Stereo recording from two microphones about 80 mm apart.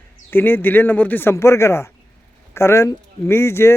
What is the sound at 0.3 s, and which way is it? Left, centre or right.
Speech, left.